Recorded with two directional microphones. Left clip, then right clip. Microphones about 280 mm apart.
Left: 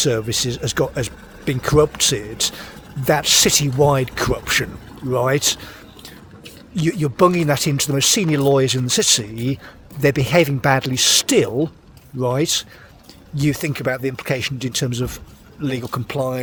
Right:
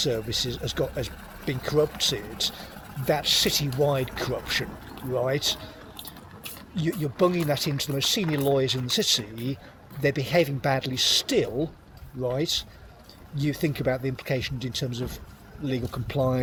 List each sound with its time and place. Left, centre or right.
0.0 s speech: left